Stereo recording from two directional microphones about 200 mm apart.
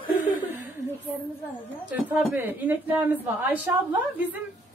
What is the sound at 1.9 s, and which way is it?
Speech, 10° right (ahead or behind).